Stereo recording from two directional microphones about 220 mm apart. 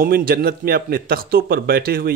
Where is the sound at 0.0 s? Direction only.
40° right (ahead or behind).